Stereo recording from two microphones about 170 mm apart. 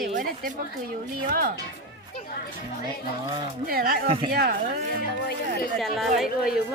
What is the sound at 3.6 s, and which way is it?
Speech, 60° right (ahead or behind).